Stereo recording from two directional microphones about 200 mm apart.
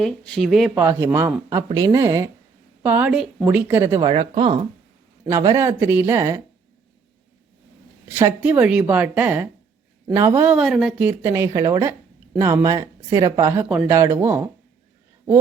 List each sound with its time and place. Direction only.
0.0 s speech: 5° left (ahead or behind)
0.7 s speech: 10° right (ahead or behind)
4.1 s speech: 25° right (ahead or behind)
5.2 s speech: 15° right (ahead or behind)
8.0 s speech: 10° right (ahead or behind)